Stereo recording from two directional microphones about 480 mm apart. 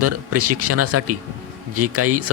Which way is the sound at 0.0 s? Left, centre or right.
Right.